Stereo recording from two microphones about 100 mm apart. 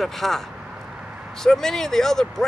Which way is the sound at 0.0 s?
5° left (ahead or behind).